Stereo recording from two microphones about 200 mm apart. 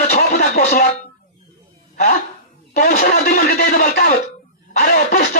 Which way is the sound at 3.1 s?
50° left (ahead or behind).